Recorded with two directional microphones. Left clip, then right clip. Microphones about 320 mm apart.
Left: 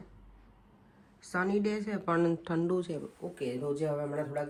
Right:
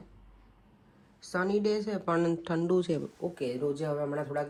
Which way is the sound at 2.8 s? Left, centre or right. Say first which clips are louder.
Right 6 dB; centre.